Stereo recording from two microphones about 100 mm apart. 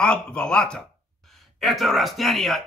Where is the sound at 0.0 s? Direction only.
10° left (ahead or behind).